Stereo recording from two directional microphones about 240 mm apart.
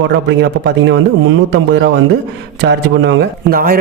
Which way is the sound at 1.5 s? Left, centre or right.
Right.